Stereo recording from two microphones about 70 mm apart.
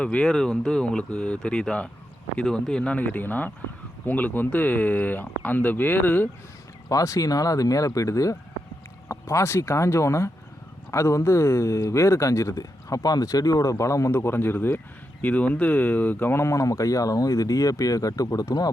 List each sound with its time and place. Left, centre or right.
0.0 s speech: centre
3.0 s speech: left
6.8 s speech: left
15.2 s speech: left
16.4 s speech: left